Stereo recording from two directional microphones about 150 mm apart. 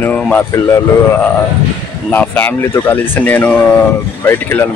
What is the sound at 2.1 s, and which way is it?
Speech, 10° left (ahead or behind).